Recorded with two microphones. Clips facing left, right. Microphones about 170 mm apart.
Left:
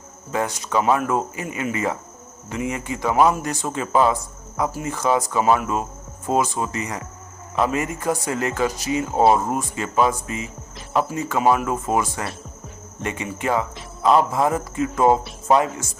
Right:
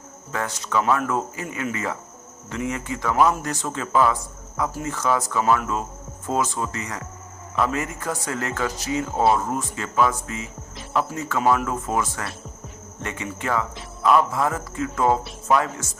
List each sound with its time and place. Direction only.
0.3 s a man's voice: 15° left (ahead or behind)
15.5 s speech: 30° left (ahead or behind)